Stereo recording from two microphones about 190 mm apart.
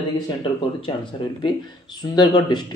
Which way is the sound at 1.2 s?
25° left (ahead or behind).